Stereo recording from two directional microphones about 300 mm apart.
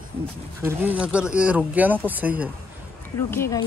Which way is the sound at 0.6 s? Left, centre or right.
Centre.